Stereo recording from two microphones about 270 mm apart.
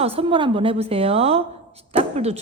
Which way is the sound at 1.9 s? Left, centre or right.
Right.